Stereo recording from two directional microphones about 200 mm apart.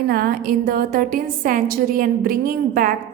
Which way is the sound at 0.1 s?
50° right (ahead or behind).